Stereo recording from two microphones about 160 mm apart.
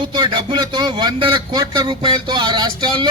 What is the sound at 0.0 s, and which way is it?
A man's voice, 30° right (ahead or behind).